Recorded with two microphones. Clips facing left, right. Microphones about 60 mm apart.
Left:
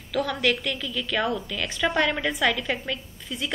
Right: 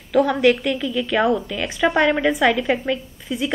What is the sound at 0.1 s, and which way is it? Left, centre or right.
A woman's voice, right.